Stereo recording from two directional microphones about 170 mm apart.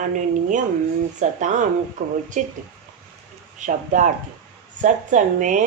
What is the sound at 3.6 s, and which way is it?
Speech, 45° right (ahead or behind).